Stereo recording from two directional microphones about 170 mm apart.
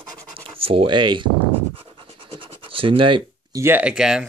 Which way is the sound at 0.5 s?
35° right (ahead or behind).